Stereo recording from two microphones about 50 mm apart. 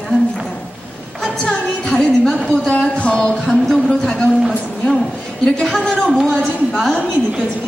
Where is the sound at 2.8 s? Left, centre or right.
Left.